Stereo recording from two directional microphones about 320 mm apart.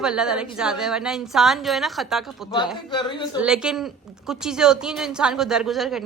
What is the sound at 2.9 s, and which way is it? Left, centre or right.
Speech, centre.